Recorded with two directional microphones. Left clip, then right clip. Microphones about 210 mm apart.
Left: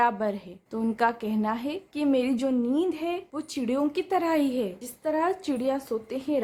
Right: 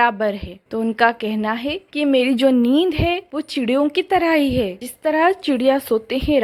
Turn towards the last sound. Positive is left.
turn(degrees=-30)  # may be behind; listen again after turning